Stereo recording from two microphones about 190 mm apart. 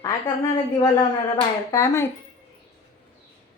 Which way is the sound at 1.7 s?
15° left (ahead or behind).